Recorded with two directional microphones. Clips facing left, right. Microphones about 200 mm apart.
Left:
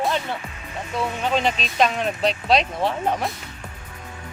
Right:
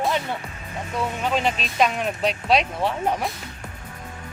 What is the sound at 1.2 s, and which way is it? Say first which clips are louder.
Speech: left 1 dB; 5° right (ahead or behind).